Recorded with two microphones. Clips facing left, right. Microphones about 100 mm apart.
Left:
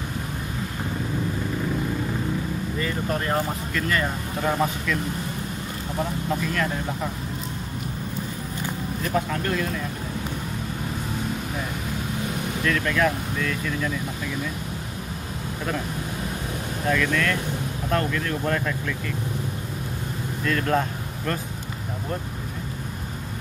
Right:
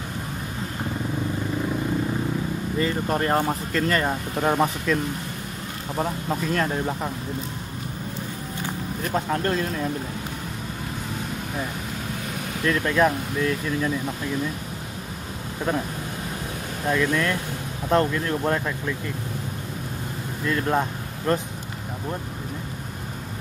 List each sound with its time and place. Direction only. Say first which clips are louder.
2.8 s speech: right 4 dB; 35° right (ahead or behind)
9.1 s speech: right 2 dB; 35° right (ahead or behind)
12.6 s speech: right 2 dB; 25° right (ahead or behind)
16.8 s speech: right 1 dB; 20° right (ahead or behind)
20.4 s speech: even; 20° right (ahead or behind)